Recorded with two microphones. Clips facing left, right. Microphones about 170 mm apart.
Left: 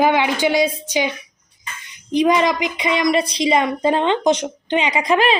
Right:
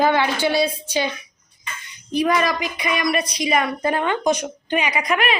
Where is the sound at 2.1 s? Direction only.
20° left (ahead or behind).